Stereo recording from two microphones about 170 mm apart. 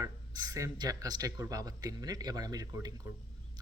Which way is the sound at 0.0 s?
20° right (ahead or behind).